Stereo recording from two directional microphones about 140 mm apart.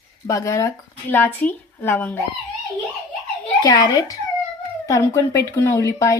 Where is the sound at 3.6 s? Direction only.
30° left (ahead or behind).